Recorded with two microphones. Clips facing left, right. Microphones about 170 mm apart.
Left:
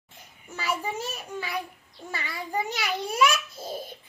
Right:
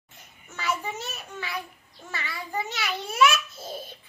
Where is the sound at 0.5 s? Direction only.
35° left (ahead or behind).